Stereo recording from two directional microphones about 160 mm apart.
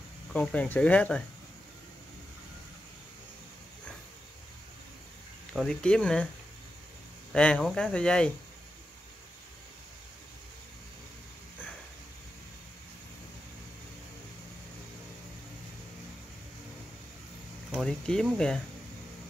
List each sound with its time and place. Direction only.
0.3 s speech: 5° left (ahead or behind)
5.5 s speech: 5° left (ahead or behind)
7.3 s speech: 5° left (ahead or behind)
17.6 s speech: centre (ahead or behind)